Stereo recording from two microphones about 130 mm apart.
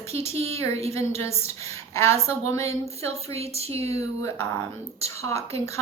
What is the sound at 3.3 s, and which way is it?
Speech, 50° right (ahead or behind).